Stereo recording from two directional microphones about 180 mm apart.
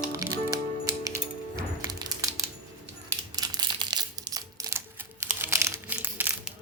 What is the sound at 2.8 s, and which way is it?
Crumpling, 20° right (ahead or behind).